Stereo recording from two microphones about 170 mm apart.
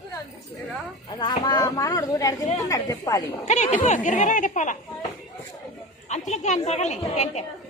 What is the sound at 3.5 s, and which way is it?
Speech, 45° left (ahead or behind).